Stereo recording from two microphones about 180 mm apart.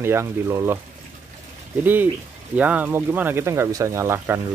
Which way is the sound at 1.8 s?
10° right (ahead or behind).